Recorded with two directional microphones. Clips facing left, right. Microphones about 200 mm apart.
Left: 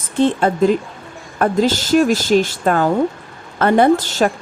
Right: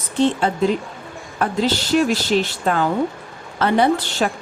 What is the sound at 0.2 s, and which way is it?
A woman's voice, 50° left (ahead or behind).